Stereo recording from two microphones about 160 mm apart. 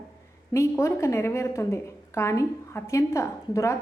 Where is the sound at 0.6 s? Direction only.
15° left (ahead or behind).